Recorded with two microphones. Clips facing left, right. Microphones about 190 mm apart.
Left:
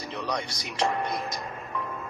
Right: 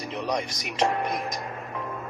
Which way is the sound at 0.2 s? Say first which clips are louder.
Right 3 dB; 20° right (ahead or behind).